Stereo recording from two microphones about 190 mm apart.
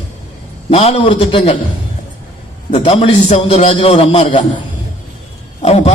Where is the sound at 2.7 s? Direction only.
30° left (ahead or behind).